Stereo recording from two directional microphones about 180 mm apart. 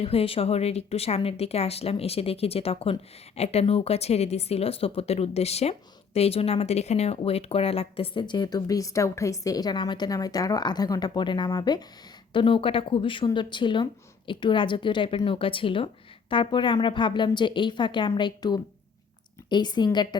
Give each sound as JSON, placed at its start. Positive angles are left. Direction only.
{"t": 0.0, "sound": "speech", "side_deg": 30}